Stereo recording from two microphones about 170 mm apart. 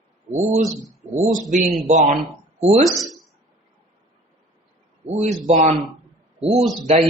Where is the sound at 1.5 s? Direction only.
45° right (ahead or behind).